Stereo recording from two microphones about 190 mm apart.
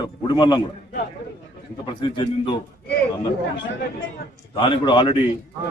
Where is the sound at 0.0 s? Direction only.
20° left (ahead or behind).